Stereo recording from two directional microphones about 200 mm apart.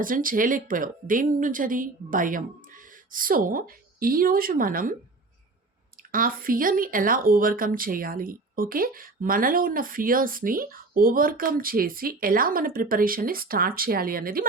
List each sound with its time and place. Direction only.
0.0 s speech: 45° right (ahead or behind)
6.0 s speech: 45° right (ahead or behind)